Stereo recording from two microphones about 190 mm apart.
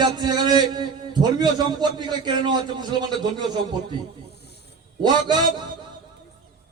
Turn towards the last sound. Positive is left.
turn(degrees=-25)  # may be behind; listen again after turning